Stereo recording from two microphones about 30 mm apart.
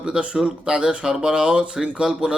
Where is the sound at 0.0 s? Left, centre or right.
Right.